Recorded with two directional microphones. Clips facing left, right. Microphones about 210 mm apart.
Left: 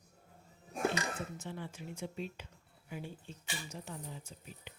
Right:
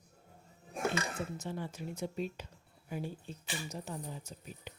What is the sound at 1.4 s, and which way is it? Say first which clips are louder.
Speech: right 4 dB; 40° right (ahead or behind).